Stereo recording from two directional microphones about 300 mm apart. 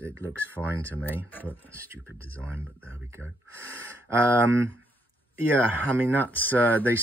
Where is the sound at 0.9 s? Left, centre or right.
Centre.